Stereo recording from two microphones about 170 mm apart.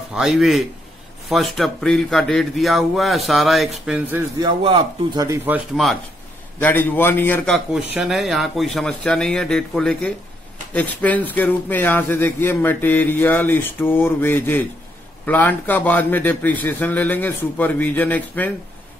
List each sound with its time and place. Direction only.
0.1 s speech: 5° right (ahead or behind)
4.4 s speech: 30° right (ahead or behind)
6.6 s a man's voice: 10° left (ahead or behind)